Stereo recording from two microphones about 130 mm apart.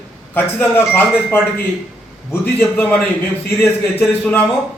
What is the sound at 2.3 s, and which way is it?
A man's voice, 15° left (ahead or behind).